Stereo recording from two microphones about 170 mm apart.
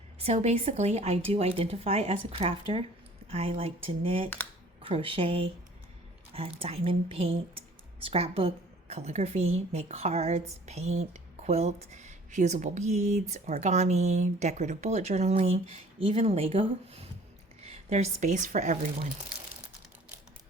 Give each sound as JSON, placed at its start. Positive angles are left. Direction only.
{"t": 0.2, "sound": "a woman's voice", "side_deg": -40}